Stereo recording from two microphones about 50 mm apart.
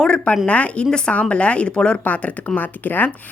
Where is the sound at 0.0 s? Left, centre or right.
Left.